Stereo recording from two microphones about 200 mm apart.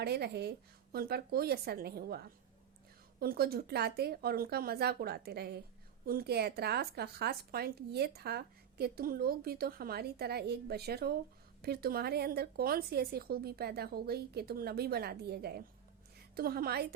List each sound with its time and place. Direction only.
0.0 s a woman's voice: 55° right (ahead or behind)